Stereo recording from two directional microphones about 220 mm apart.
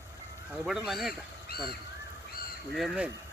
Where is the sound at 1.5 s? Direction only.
45° left (ahead or behind).